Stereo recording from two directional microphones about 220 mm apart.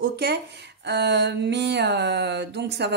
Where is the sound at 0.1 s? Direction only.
50° right (ahead or behind).